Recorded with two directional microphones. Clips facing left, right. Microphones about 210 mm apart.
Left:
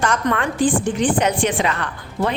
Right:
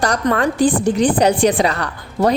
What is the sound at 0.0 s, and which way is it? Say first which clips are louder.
A woman's voice: right 3 dB; 35° right (ahead or behind).